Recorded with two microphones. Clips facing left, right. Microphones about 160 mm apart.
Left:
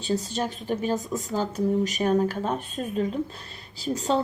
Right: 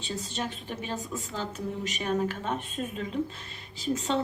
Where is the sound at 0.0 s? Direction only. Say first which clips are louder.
Left 7 dB; 40° left (ahead or behind).